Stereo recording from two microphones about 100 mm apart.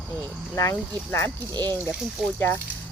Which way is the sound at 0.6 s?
25° left (ahead or behind).